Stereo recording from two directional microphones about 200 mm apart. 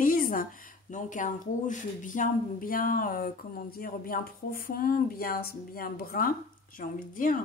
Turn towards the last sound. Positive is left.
turn(degrees=45)  # may be behind; listen again after turning